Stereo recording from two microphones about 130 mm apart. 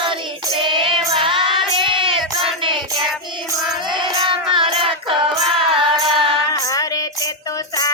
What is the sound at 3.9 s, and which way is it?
Child singing, 35° right (ahead or behind).